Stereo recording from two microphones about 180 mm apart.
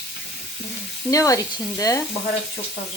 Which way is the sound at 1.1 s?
20° left (ahead or behind).